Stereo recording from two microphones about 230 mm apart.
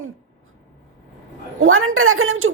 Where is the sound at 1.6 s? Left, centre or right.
Right.